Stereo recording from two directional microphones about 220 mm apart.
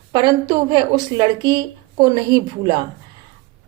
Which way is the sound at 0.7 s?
20° right (ahead or behind).